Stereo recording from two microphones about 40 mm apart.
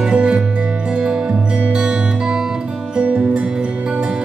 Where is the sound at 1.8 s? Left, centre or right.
Centre.